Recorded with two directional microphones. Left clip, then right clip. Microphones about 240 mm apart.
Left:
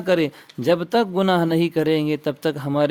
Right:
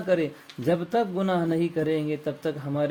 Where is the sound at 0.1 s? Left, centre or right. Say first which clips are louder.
Left 5 dB; left.